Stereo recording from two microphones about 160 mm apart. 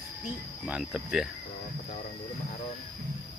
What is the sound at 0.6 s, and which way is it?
Cricket, 5° right (ahead or behind).